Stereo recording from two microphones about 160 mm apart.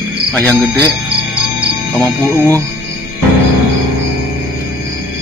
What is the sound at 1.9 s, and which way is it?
Speech, 10° left (ahead or behind).